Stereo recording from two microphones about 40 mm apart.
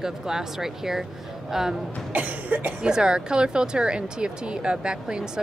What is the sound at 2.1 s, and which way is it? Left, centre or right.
Cough, right.